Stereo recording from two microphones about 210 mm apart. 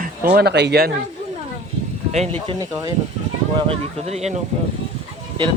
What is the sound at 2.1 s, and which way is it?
Speech, 30° right (ahead or behind).